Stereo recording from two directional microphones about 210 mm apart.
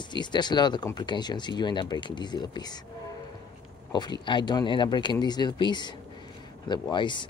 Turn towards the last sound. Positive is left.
turn(degrees=20)  # may be behind; listen again after turning